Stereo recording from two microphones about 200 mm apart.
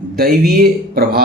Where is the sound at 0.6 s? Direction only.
50° right (ahead or behind).